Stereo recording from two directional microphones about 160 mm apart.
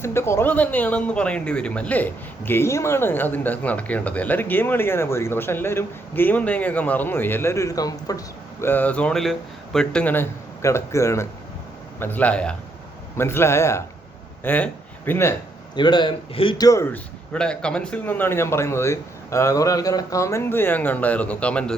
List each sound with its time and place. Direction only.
0.0 s speech: 15° left (ahead or behind)
8.6 s speech: 10° left (ahead or behind)
15.7 s a man's voice: 30° left (ahead or behind)
16.6 s speech: 15° left (ahead or behind)
17.3 s speech: 5° left (ahead or behind)